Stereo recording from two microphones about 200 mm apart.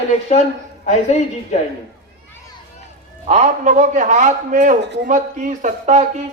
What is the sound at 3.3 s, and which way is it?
A man's voice, 35° right (ahead or behind).